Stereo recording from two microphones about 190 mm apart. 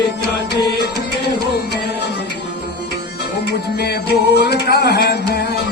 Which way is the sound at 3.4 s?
60° left (ahead or behind).